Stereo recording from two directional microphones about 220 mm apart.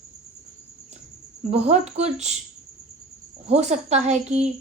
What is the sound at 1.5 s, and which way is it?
Speech, 30° right (ahead or behind).